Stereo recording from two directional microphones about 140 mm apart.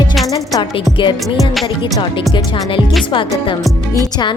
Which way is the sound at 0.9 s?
35° left (ahead or behind).